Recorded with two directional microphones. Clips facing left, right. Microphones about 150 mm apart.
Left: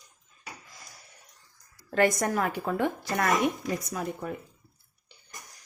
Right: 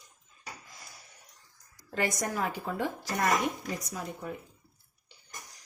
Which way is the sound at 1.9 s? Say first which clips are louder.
Left 7 dB; 60° left (ahead or behind).